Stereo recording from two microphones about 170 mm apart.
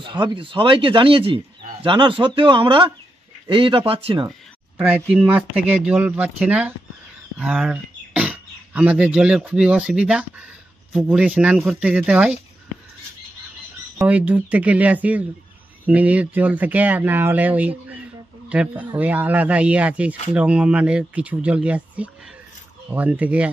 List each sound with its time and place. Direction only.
0.0 s speech: 30° right (ahead or behind)
4.7 s speech: 10° right (ahead or behind)
13.9 s speech: 10° right (ahead or behind)